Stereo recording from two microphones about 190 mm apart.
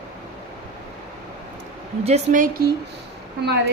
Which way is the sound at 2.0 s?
40° right (ahead or behind).